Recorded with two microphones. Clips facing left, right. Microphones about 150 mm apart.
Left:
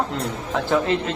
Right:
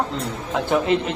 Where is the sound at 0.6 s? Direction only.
20° right (ahead or behind).